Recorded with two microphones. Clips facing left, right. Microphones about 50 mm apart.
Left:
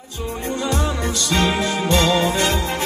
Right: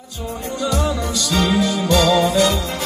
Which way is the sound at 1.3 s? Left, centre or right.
Left.